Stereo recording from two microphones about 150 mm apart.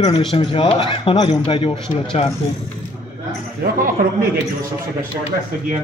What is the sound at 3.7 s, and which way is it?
Speech, 70° right (ahead or behind).